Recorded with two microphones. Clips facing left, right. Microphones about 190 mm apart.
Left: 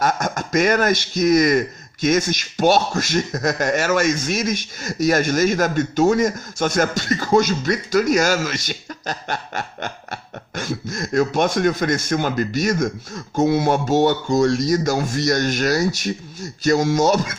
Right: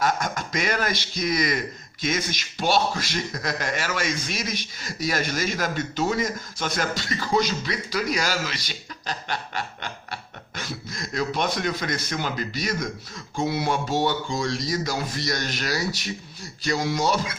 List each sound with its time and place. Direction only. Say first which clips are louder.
0.0 s a man's voice: left 4 dB; 45° left (ahead or behind)